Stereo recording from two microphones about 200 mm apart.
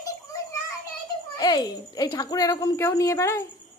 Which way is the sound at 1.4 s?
20° left (ahead or behind).